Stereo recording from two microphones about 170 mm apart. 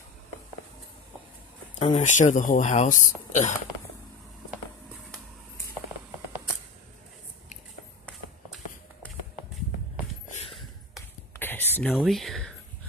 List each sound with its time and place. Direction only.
1.8 s speech: 45° left (ahead or behind)
11.3 s whispering: 10° left (ahead or behind)